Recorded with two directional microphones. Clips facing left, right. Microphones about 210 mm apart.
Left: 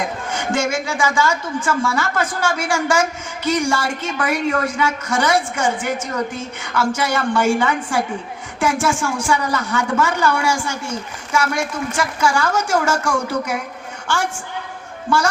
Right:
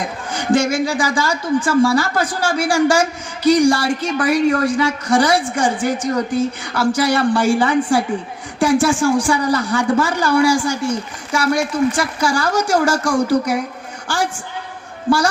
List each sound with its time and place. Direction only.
0.3 s a woman's voice: 35° right (ahead or behind)